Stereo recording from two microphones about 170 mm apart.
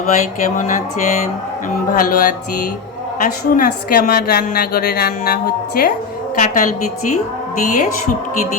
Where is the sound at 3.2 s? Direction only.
55° left (ahead or behind).